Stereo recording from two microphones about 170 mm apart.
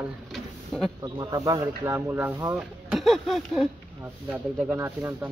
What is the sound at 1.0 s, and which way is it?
Speech, 20° right (ahead or behind).